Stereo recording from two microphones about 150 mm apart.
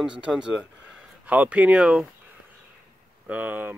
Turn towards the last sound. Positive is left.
turn(degrees=-10)  # may be behind; listen again after turning